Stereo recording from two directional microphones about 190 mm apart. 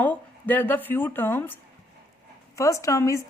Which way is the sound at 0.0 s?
10° left (ahead or behind).